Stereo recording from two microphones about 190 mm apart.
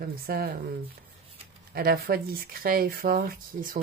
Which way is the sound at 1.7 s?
55° right (ahead or behind).